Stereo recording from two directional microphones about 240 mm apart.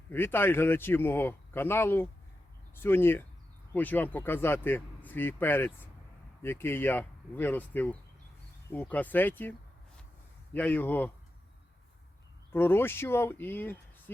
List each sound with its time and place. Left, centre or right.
0.1 s a man's voice: centre
12.5 s a man's voice: centre